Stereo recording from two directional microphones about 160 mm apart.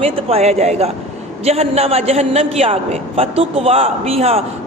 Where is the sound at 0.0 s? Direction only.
40° right (ahead or behind).